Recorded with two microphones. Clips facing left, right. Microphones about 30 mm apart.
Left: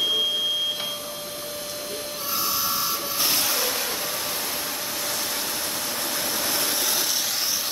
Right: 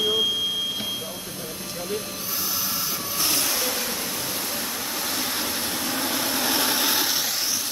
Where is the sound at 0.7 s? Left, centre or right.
Centre.